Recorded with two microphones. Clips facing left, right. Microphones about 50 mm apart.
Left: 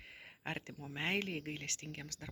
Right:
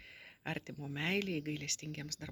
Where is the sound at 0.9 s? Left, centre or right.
Left.